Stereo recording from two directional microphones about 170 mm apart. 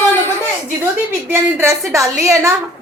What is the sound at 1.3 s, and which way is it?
A woman's voice, 15° right (ahead or behind).